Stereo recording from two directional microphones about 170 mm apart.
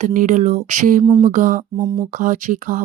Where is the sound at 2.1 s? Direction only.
50° right (ahead or behind).